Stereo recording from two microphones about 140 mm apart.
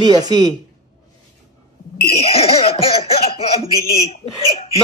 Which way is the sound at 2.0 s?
45° left (ahead or behind).